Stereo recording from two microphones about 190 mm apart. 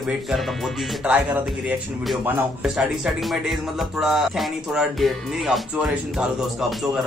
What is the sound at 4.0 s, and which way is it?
Speech, centre (ahead or behind).